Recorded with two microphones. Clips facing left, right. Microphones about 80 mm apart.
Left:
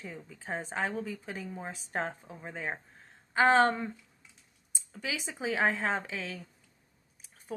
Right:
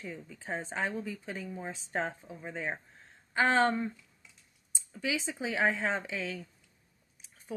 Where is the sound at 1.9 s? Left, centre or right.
Left.